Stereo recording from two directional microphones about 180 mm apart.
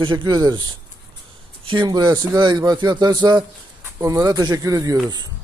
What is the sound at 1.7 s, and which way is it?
Speech, 25° right (ahead or behind).